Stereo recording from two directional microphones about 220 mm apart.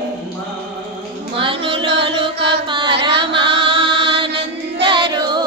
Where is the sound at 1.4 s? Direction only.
25° right (ahead or behind).